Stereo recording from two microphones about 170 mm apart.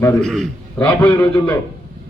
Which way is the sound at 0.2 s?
Centre (ahead or behind).